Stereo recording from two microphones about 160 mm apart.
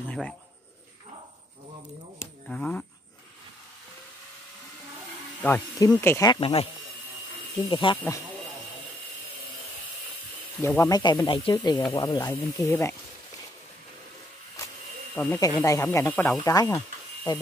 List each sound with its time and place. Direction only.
2.1 s a sound: centre (ahead or behind)
5.4 s speech: 10° left (ahead or behind)
6.4 s speech: 40° left (ahead or behind)
10.6 s speech: 15° left (ahead or behind); by 11.5 s 35° left (ahead or behind)
11.5 s speech: 25° left (ahead or behind)
15.1 s speech: 10° left (ahead or behind)